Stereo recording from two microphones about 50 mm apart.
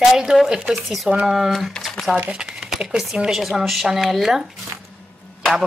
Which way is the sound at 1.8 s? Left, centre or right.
Centre.